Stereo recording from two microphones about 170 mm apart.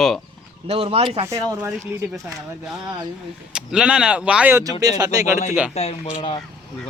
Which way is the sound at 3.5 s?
5° right (ahead or behind).